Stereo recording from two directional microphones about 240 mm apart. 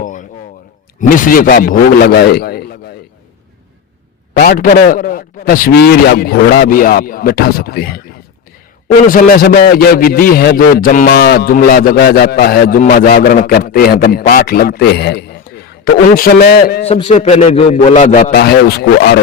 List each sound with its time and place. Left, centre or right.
0.0 s a sound: left
1.0 s a man's voice: left
4.4 s a man's voice: left
9.0 s a man's voice: left
16.8 s a man's voice: left